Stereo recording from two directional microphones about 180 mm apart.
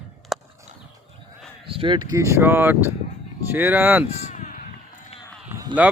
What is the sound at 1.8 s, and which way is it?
Speech, 25° right (ahead or behind).